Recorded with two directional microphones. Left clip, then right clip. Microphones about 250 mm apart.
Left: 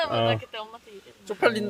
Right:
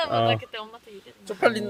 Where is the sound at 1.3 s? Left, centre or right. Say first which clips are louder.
Right 1 dB; centre.